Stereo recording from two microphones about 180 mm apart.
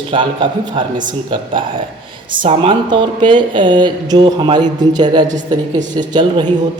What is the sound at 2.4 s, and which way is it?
Speech, 30° right (ahead or behind).